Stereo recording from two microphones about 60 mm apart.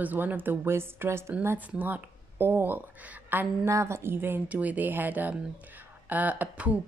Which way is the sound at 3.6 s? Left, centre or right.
Right.